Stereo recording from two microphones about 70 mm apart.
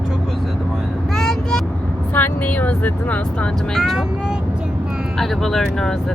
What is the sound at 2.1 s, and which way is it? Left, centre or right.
Speech, left.